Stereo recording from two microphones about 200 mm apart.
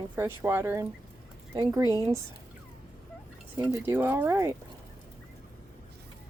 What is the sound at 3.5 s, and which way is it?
Speech, 10° right (ahead or behind).